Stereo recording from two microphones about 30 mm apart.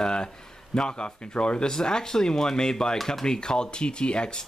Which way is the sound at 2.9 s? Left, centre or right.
Centre.